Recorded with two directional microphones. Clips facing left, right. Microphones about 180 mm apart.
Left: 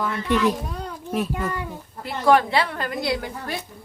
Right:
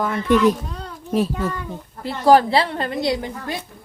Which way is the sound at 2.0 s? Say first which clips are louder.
Right 4 dB; 30° right (ahead or behind).